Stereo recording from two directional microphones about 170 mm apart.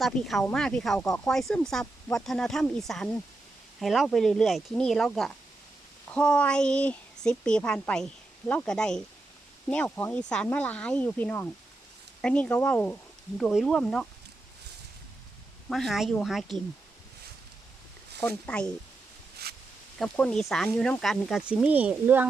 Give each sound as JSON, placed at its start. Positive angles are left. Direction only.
{"t": 0.0, "sound": "speech", "side_deg": 0}
{"t": 15.7, "sound": "speech", "side_deg": 0}
{"t": 18.2, "sound": "speech", "side_deg": 5}
{"t": 19.4, "sound": "snake", "side_deg": -70}
{"t": 20.0, "sound": "speech", "side_deg": 5}